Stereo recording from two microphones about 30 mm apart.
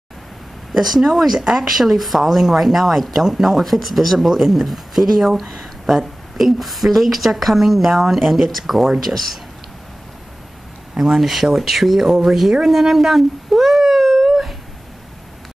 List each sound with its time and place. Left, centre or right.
0.7 s speech: centre
1.4 s speech: right
1.8 s speech: centre
11.0 s speech: centre
12.6 s a sound: centre